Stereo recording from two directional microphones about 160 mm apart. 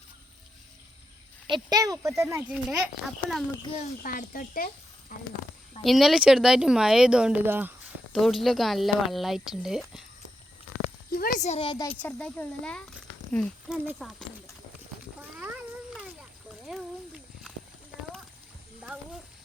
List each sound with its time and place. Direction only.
1.5 s speech: 25° right (ahead or behind)
2.5 s speech: 5° right (ahead or behind)
3.6 s a child's voice: 35° left (ahead or behind)
4.0 s speech: 60° left (ahead or behind)
5.1 s speech: 50° left (ahead or behind)
5.8 s speech: centre (ahead or behind)
8.1 s speech: centre (ahead or behind)
11.1 s speech: 60° left (ahead or behind); by 11.9 s 30° left (ahead or behind)
12.0 s speech: 10° left (ahead or behind)
15.2 s cat: 10° right (ahead or behind)
16.6 s a sound: centre (ahead or behind)